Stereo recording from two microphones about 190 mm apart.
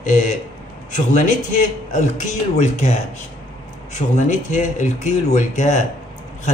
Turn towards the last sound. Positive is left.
turn(degrees=40)  # may be behind; listen again after turning